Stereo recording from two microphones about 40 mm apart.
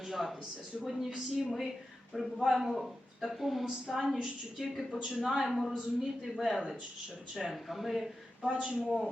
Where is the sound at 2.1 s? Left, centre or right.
Centre.